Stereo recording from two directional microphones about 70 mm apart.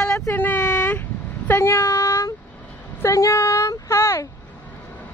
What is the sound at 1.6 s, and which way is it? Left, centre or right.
Speech, left.